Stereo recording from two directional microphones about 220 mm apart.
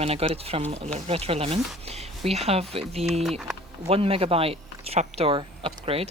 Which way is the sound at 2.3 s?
30° right (ahead or behind).